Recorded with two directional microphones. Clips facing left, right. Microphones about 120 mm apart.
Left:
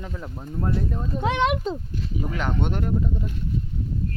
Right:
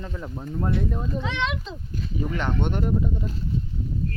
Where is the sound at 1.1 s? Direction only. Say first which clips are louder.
Left 9 dB; 50° left (ahead or behind).